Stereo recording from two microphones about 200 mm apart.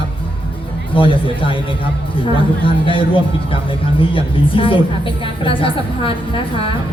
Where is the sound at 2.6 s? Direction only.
25° left (ahead or behind).